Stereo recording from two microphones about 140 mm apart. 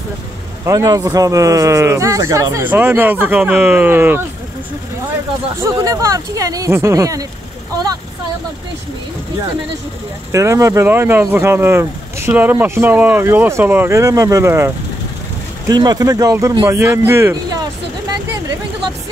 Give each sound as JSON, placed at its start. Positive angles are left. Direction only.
{"t": 0.7, "sound": "speech", "side_deg": -25}
{"t": 5.6, "sound": "speech", "side_deg": -25}
{"t": 10.3, "sound": "speech", "side_deg": -20}